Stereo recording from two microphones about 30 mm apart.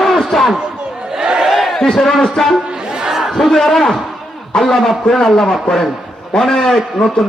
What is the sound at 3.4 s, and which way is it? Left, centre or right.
A man's voice, centre.